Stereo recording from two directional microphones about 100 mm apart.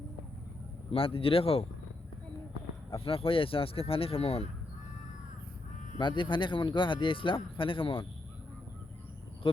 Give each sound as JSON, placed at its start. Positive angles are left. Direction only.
{"t": 0.9, "sound": "speech", "side_deg": 65}
{"t": 2.9, "sound": "speech", "side_deg": 65}
{"t": 6.0, "sound": "speech", "side_deg": 55}